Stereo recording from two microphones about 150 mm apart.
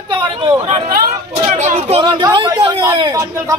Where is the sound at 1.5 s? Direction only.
50° right (ahead or behind).